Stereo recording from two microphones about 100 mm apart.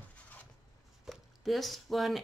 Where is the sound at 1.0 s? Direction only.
Centre (ahead or behind).